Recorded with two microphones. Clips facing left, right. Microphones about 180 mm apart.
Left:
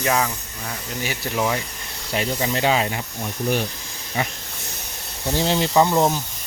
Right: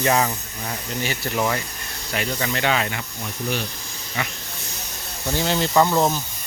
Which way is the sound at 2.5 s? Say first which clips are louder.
Left 3 dB; 30° left (ahead or behind).